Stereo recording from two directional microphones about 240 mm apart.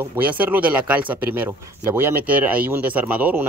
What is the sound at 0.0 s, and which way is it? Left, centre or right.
Speech, centre.